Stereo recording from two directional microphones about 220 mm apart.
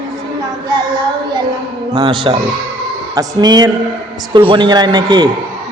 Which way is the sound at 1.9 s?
20° right (ahead or behind).